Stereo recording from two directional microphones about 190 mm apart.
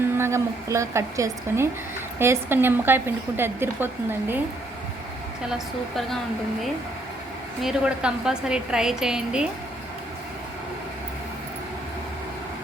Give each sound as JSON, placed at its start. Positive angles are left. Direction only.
{"t": 0.2, "sound": "a woman's voice", "side_deg": -15}
{"t": 7.6, "sound": "a woman's voice", "side_deg": -5}